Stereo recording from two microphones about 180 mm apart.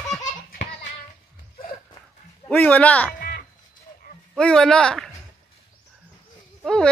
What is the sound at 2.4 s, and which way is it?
Speech, 10° left (ahead or behind).